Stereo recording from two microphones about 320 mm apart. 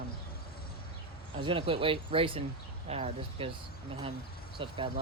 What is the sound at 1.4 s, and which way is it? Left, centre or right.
Speech, centre.